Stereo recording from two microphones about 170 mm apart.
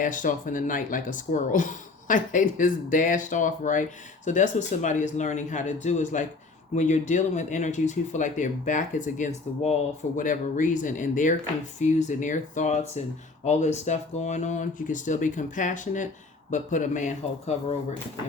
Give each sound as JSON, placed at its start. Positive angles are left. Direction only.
{"t": 0.0, "sound": "speech", "side_deg": 50}